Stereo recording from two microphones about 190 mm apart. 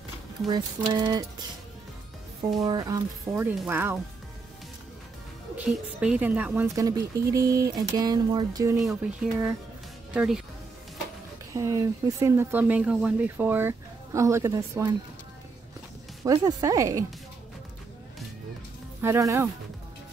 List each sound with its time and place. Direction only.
0.5 s speech: 20° right (ahead or behind)
2.6 s speech: 20° right (ahead or behind)
5.6 s speech: 5° right (ahead or behind); by 8.7 s 20° right (ahead or behind)
8.7 s speech: centre (ahead or behind)
11.5 s speech: 15° right (ahead or behind)
16.3 s speech: 20° right (ahead or behind)
18.9 s speech: 15° right (ahead or behind)